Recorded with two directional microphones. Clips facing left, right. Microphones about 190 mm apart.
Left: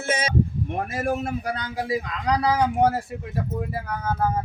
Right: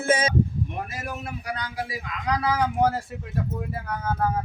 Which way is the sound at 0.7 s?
50° left (ahead or behind).